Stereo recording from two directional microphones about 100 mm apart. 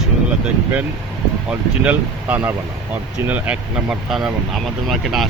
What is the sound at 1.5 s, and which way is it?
Speech, 15° right (ahead or behind).